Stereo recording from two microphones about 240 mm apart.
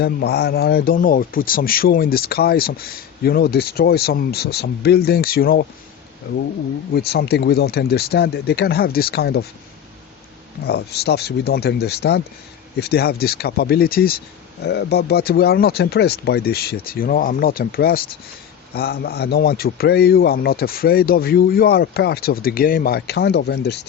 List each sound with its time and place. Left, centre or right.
0.0 s a man's voice: left
6.9 s a man's voice: left
10.7 s a man's voice: left